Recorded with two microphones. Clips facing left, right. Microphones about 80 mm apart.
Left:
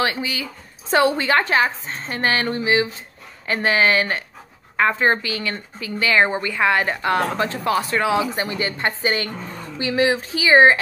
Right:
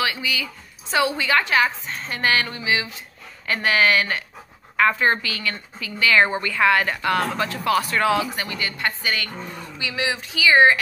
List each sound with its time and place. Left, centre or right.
0.0 s a woman's voice: left